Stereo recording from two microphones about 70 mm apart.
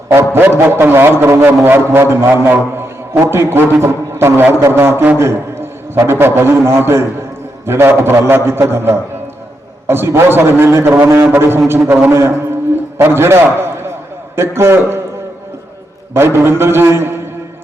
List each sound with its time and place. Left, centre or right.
0.1 s a man's voice: right
16.1 s a man's voice: right